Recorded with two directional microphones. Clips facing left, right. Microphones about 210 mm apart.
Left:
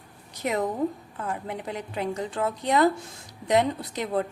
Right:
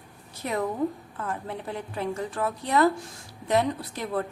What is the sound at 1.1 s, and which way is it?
A woman's voice, 15° left (ahead or behind).